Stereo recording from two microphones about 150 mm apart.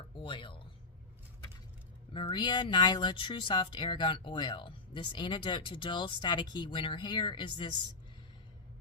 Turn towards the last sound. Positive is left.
turn(degrees=30)  # may be behind; listen again after turning